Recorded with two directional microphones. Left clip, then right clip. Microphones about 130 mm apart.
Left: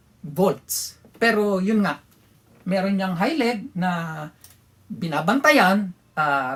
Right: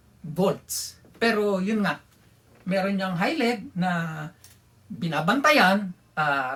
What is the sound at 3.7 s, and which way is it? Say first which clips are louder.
Speech: left 2 dB; 40° left (ahead or behind).